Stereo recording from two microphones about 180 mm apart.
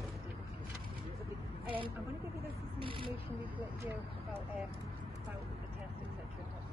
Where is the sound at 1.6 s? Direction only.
30° right (ahead or behind).